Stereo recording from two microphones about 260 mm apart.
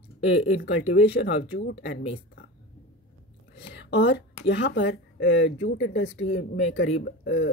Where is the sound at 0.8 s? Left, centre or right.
Left.